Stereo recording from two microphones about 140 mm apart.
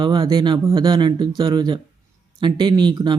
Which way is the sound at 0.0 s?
35° right (ahead or behind).